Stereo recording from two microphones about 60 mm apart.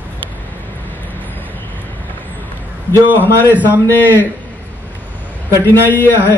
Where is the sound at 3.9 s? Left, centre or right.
Left.